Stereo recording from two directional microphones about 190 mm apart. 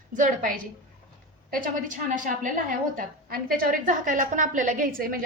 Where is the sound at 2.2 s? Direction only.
45° right (ahead or behind).